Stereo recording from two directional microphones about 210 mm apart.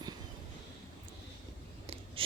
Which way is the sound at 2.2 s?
25° right (ahead or behind).